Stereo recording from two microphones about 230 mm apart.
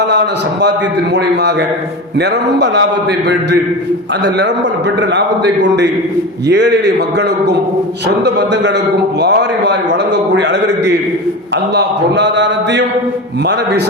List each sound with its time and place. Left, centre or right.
1.1 s a man's voice: right